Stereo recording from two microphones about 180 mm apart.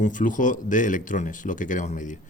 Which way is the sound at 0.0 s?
45° left (ahead or behind).